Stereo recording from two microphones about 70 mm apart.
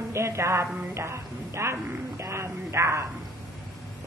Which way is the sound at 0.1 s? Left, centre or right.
Right.